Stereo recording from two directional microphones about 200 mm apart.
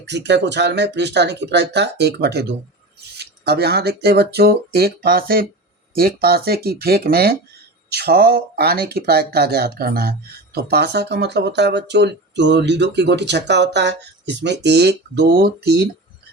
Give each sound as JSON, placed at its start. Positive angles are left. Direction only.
{"t": 0.0, "sound": "speech", "side_deg": -60}